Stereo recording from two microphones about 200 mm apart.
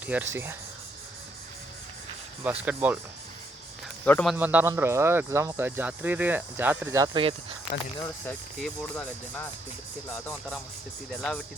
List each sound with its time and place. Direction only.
0.0 s speech: 10° right (ahead or behind)
2.4 s speech: 10° right (ahead or behind)
4.0 s speech: 5° left (ahead or behind)
4.4 s speech: 10° right (ahead or behind); by 7.3 s 25° right (ahead or behind)
7.9 s speech: 10° left (ahead or behind)
11.1 s speech: 5° left (ahead or behind)